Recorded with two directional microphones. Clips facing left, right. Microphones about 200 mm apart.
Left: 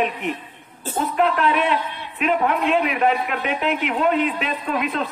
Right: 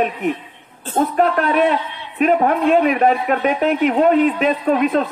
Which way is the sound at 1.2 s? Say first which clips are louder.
Right 3 dB; 45° right (ahead or behind).